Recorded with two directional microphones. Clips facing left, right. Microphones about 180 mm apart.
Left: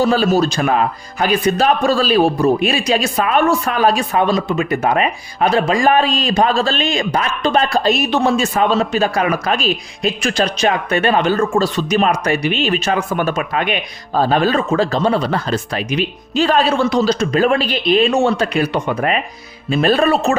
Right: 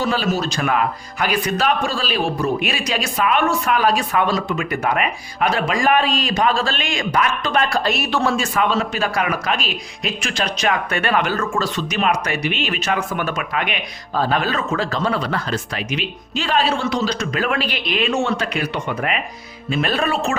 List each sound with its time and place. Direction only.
0.0 s a woman's voice: 40° left (ahead or behind)
1.6 s a woman's voice: 40° left (ahead or behind)